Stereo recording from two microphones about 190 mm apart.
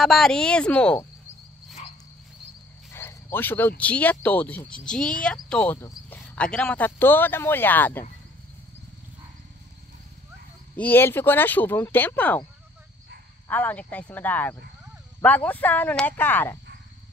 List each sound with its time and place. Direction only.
0.0 s speech: centre (ahead or behind)
1.8 s cricket: 35° left (ahead or behind)
2.9 s speech: 15° left (ahead or behind)
10.8 s speech: 10° left (ahead or behind)
13.5 s speech: 10° left (ahead or behind)